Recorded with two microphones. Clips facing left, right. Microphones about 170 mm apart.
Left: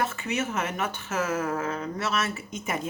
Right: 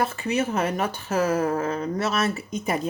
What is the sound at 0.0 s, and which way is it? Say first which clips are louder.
A woman's voice: right 4 dB; 35° right (ahead or behind).